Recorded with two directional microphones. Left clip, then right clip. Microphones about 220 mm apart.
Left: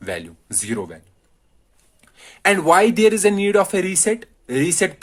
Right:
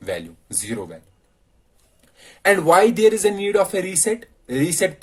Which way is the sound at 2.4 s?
45° left (ahead or behind).